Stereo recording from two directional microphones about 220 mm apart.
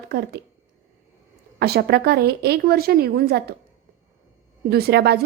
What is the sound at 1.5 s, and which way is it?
A woman's voice, 45° right (ahead or behind).